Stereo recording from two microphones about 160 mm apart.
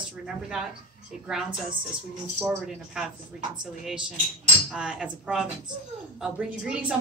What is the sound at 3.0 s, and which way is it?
A woman's voice, 5° right (ahead or behind).